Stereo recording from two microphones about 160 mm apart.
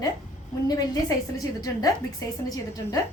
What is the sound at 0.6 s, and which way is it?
A woman's voice, 25° left (ahead or behind).